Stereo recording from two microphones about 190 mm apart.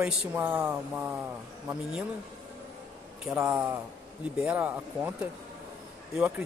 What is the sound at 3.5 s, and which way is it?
Speech, 5° right (ahead or behind).